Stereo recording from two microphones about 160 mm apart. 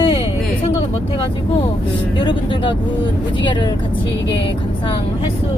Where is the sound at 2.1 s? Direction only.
30° left (ahead or behind).